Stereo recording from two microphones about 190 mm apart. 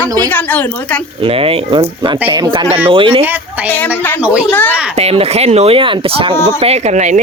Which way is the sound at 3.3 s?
10° right (ahead or behind).